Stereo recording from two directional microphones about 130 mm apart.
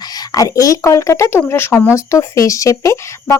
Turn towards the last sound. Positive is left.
turn(degrees=25)  # may be behind; listen again after turning